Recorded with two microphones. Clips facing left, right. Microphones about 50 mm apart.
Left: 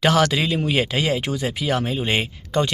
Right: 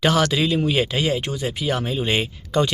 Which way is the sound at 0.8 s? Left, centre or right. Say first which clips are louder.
Even; left.